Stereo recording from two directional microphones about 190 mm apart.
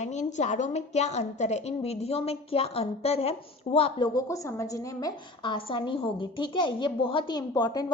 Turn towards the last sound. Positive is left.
turn(degrees=20)  # may be behind; listen again after turning